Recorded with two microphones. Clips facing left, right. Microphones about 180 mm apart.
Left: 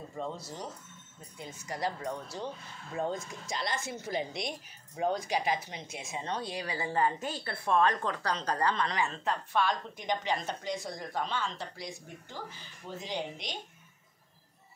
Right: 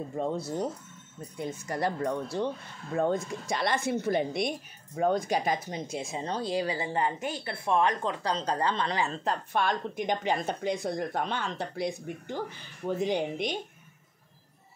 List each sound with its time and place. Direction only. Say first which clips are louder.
0.1 s speech: right 7 dB; 55° right (ahead or behind)